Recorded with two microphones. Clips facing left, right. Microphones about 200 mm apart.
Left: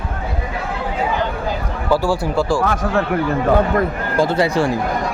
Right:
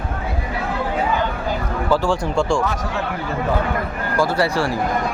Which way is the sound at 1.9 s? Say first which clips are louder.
Left 2 dB; 5° left (ahead or behind).